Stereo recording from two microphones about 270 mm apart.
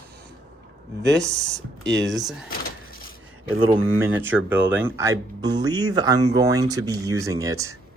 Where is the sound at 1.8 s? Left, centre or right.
Right.